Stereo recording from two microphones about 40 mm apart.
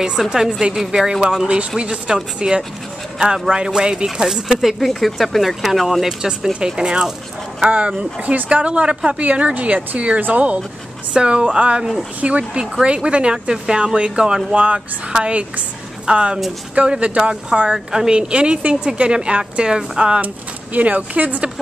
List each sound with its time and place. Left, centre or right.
0.2 s speech: centre
1.8 s speech: right
7.6 s a woman's voice: right
11.1 s a woman's voice: right
14.5 s a woman's voice: right
17.7 s speech: centre
18.1 s speech: right
20.7 s a woman's voice: right